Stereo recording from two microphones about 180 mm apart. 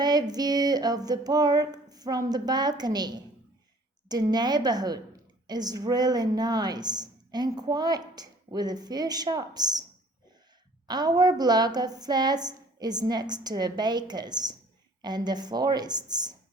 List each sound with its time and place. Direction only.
0.0 s a woman's voice: 20° right (ahead or behind)
10.8 s a woman's voice: 20° right (ahead or behind)